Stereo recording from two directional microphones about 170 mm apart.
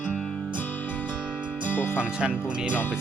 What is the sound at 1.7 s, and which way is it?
Music, 10° left (ahead or behind).